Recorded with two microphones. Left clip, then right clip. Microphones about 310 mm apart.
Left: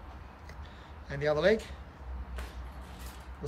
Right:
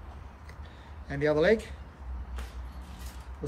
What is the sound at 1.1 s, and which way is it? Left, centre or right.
Speech, centre.